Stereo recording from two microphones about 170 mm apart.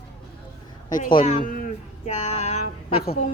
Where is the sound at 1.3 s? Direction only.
50° left (ahead or behind).